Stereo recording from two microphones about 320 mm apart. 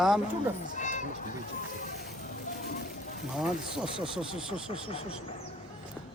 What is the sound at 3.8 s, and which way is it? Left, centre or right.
Speech, centre.